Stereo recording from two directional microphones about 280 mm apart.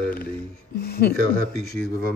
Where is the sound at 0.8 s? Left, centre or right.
Left.